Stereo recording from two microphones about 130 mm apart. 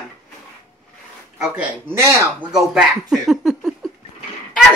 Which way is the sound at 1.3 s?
5° right (ahead or behind).